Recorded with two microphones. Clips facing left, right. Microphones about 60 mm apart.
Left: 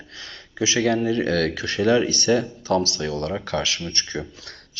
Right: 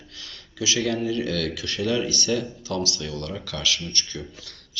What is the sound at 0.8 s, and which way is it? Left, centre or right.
Speech, left.